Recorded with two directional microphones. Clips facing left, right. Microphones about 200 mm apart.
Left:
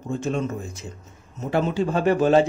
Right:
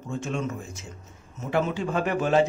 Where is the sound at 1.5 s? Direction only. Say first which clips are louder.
Left 3 dB; 35° left (ahead or behind).